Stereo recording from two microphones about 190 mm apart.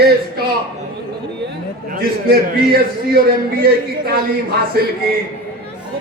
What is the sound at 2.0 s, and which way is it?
Speech, 50° right (ahead or behind).